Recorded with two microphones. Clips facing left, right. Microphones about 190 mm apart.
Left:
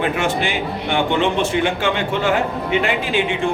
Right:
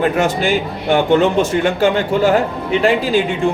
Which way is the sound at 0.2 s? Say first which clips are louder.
Right 5 dB; 40° right (ahead or behind).